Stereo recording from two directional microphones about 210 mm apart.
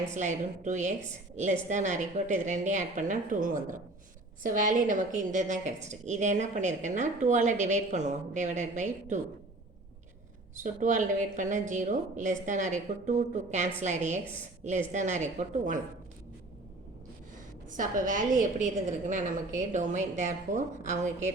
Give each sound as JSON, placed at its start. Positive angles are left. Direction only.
{"t": 0.1, "sound": "a woman's voice", "side_deg": -35}
{"t": 10.6, "sound": "a woman's voice", "side_deg": -35}
{"t": 17.7, "sound": "a woman's voice", "side_deg": -40}